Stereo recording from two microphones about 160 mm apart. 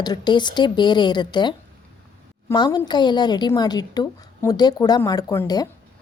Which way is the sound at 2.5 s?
25° left (ahead or behind).